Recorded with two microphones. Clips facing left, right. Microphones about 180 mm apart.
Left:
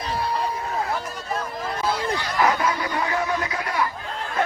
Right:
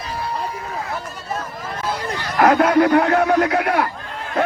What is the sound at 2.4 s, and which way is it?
Speech, 60° right (ahead or behind).